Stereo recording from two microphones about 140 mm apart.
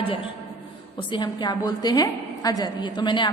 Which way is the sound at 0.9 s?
35° left (ahead or behind).